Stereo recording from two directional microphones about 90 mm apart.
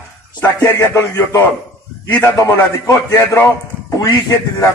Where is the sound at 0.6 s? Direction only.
30° left (ahead or behind).